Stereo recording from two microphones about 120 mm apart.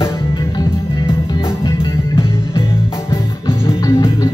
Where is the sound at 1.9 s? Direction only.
20° left (ahead or behind).